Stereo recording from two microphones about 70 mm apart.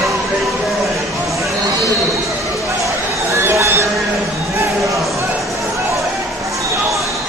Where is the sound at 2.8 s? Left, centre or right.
Right.